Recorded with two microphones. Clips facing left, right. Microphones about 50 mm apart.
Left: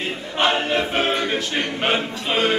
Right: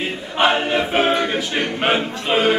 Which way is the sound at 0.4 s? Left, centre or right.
Centre.